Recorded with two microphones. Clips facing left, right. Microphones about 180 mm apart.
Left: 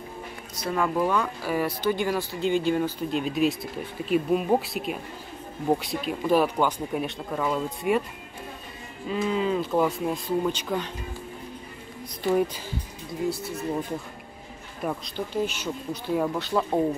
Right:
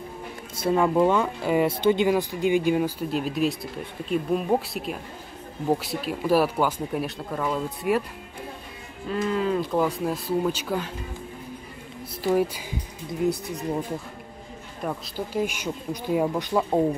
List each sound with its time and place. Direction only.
0.6 s speech: 25° right (ahead or behind); by 8.0 s centre (ahead or behind)
9.1 s speech: centre (ahead or behind)
13.2 s speech: 20° right (ahead or behind)
14.8 s speech: centre (ahead or behind)
15.3 s speech: 10° right (ahead or behind)